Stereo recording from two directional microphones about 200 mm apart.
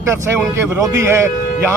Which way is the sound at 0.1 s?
15° right (ahead or behind).